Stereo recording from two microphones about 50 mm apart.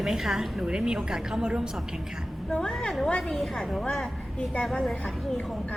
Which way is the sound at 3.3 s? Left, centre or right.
Centre.